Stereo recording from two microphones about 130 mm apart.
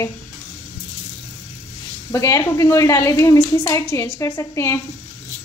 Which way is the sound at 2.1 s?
25° left (ahead or behind).